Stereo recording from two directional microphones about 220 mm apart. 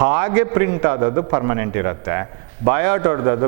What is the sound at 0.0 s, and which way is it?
A man's voice, 15° right (ahead or behind).